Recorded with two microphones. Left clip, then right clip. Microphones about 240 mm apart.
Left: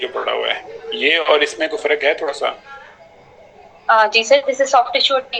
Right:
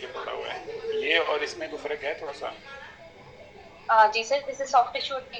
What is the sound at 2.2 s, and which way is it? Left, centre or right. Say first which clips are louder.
Speech: left 14 dB; left.